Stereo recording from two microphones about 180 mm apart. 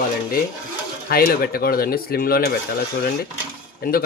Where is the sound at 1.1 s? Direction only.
55° left (ahead or behind).